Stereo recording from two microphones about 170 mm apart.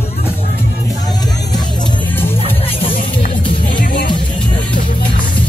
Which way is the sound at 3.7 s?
55° left (ahead or behind).